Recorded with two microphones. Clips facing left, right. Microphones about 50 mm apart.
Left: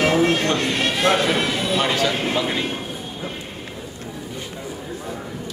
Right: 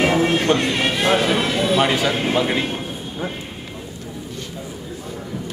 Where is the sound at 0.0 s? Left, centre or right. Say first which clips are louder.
Even; centre.